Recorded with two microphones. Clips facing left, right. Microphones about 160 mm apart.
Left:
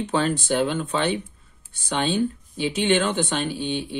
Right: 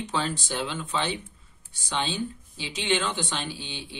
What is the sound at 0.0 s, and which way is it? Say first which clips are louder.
Speech: left 6 dB; 55° left (ahead or behind).